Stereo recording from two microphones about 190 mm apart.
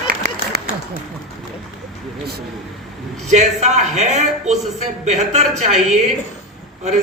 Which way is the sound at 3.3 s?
35° right (ahead or behind).